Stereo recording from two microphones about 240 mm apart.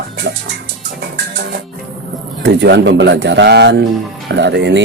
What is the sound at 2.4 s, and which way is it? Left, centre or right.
Speech, right.